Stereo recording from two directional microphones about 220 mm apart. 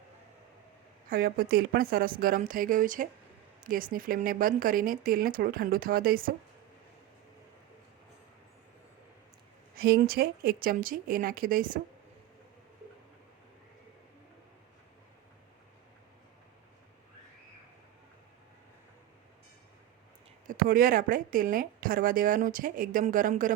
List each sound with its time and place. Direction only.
1.1 s speech: 45° right (ahead or behind)
9.7 s speech: 45° right (ahead or behind)
20.5 s speech: 40° right (ahead or behind)